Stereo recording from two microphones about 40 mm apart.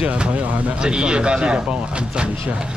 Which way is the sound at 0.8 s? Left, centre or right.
Right.